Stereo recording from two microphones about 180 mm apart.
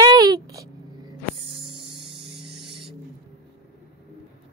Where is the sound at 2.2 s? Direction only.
65° right (ahead or behind).